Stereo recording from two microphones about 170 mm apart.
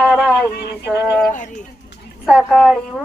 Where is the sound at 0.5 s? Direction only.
65° left (ahead or behind).